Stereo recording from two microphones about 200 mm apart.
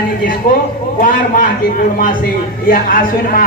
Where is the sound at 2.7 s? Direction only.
45° left (ahead or behind).